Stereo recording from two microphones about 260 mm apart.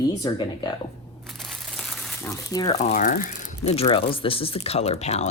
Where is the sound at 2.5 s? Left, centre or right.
Centre.